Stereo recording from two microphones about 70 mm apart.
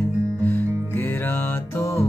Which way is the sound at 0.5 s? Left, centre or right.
Left.